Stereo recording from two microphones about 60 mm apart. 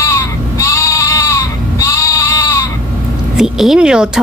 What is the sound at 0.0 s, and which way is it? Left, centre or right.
Sheep, left.